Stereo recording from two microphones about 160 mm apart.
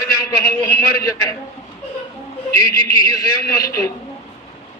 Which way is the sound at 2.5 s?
20° left (ahead or behind).